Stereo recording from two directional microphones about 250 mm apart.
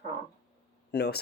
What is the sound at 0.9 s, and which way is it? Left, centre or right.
Speech, left.